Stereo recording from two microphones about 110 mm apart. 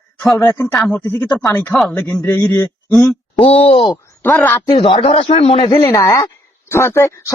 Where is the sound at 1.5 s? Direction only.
25° left (ahead or behind).